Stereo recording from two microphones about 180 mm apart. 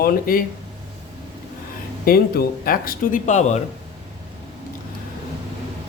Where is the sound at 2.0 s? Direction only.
55° left (ahead or behind); by 3.6 s 40° left (ahead or behind).